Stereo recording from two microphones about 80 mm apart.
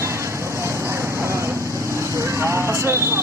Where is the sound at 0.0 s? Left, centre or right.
Right.